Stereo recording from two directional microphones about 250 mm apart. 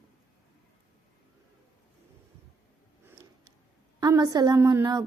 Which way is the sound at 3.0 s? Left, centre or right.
Centre.